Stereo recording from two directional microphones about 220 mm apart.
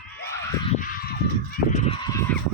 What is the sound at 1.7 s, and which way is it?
Fowl, 30° left (ahead or behind).